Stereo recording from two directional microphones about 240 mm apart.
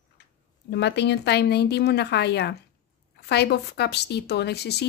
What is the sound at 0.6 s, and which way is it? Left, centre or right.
A woman's voice, left.